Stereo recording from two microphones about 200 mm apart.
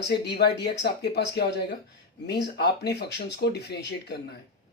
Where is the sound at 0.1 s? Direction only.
55° left (ahead or behind).